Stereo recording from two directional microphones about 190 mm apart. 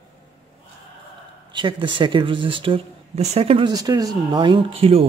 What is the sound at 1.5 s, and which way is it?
Speech, 25° right (ahead or behind).